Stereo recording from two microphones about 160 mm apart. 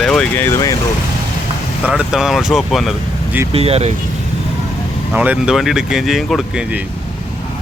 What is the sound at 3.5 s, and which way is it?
Speech, 40° right (ahead or behind).